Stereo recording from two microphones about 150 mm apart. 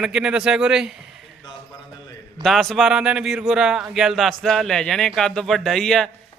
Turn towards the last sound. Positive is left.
turn(degrees=5)  # may be behind; listen again after turning